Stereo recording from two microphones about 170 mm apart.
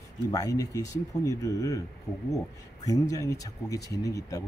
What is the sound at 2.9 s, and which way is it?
Speech, 20° left (ahead or behind).